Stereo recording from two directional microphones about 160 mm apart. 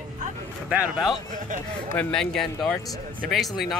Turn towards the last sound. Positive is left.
turn(degrees=0)  # may be behind; listen again after turning